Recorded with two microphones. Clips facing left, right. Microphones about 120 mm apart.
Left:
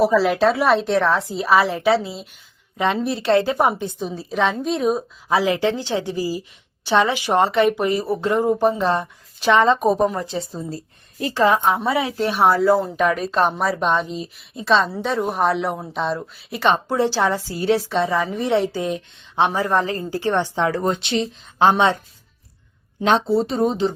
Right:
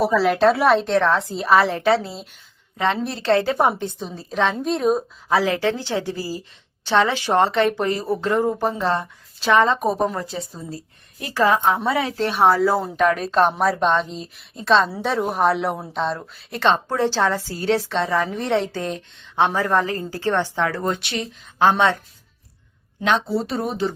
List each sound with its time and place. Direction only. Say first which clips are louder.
0.2 s a woman's voice: right 1 dB; centre (ahead or behind)
2.7 s speech: left 2 dB; 15° left (ahead or behind)
4.1 s a woman's voice: even; centre (ahead or behind)
5.3 s speech: left 1 dB; 15° left (ahead or behind)
10.2 s a woman's voice: left 3 dB; 25° left (ahead or behind)
12.4 s a woman's voice: left 1 dB; centre (ahead or behind); by 21.9 s 20° left (ahead or behind)
23.0 s a woman's voice: left 3 dB; 30° left (ahead or behind)